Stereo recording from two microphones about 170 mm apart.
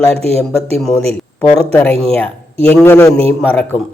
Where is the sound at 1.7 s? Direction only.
10° left (ahead or behind).